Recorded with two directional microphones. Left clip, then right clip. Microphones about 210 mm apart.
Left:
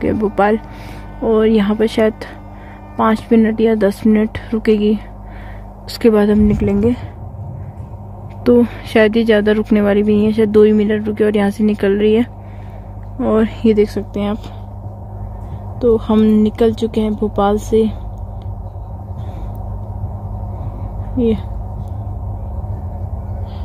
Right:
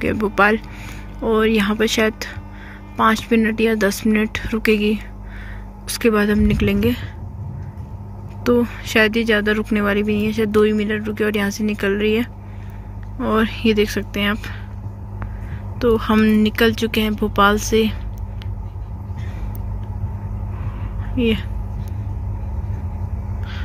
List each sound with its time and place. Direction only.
0.0 s speech: 15° left (ahead or behind)
8.5 s speech: 20° left (ahead or behind)
16.0 s speech: 15° left (ahead or behind)
17.2 s speech: 10° right (ahead or behind)
17.6 s speech: 15° left (ahead or behind)
21.2 s speech: 15° left (ahead or behind)